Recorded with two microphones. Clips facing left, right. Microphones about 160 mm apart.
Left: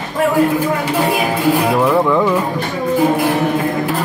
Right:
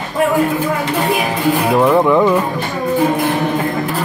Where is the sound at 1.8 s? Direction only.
20° right (ahead or behind).